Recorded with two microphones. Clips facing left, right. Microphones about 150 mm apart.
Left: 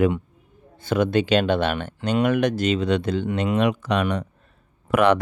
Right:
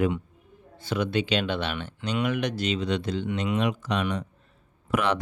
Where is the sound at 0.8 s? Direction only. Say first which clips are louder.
Left 6 dB; 50° left (ahead or behind).